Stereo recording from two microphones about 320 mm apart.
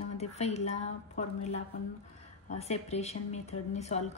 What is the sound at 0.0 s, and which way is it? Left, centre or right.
A woman's voice, centre.